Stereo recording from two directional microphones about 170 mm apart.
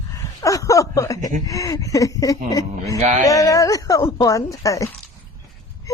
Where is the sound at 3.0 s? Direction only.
45° right (ahead or behind).